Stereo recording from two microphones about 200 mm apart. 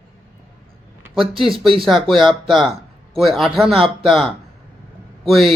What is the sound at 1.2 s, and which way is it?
Speech, 25° right (ahead or behind).